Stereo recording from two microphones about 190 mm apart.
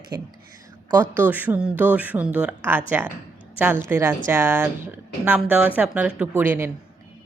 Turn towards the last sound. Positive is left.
turn(degrees=-10)  # may be behind; listen again after turning